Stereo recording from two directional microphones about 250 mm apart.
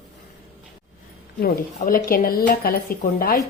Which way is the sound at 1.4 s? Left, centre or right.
Left.